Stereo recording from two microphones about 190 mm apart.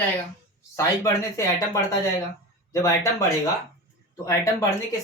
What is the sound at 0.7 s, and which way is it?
Speech, 15° left (ahead or behind).